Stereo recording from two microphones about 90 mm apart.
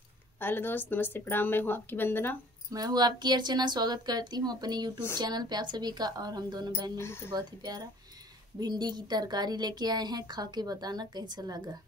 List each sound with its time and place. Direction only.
0.4 s speech: 25° left (ahead or behind)
2.7 s a woman's voice: 45° right (ahead or behind)
7.0 s speech: 30° left (ahead or behind)
7.3 s a woman's voice: 50° right (ahead or behind)